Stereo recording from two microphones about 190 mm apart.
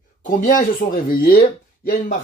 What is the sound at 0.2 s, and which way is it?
Speech, 45° left (ahead or behind).